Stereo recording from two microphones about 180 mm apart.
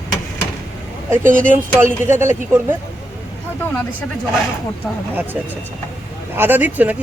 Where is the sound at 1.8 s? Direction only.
15° right (ahead or behind).